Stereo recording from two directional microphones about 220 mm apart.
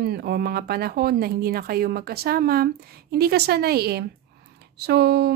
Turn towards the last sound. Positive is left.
turn(degrees=-45)  # may be behind; listen again after turning